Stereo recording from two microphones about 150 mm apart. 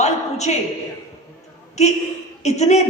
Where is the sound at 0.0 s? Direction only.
50° left (ahead or behind).